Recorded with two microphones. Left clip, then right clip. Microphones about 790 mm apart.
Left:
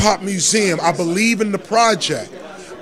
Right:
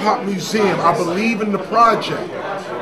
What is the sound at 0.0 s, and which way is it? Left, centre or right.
A man's voice, left.